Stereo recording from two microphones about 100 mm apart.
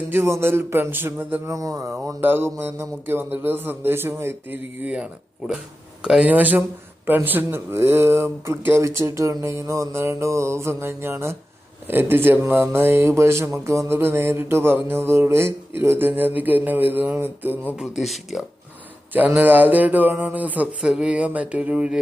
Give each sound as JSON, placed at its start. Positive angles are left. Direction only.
{"t": 0.1, "sound": "speech", "side_deg": -25}
{"t": 1.5, "sound": "speech", "side_deg": -35}
{"t": 2.2, "sound": "speech", "side_deg": -20}
{"t": 17.7, "sound": "speech", "side_deg": -5}
{"t": 19.1, "sound": "speech", "side_deg": -15}